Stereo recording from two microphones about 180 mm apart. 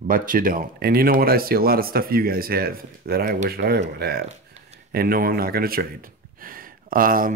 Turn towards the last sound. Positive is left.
turn(degrees=-50)  # may be behind; listen again after turning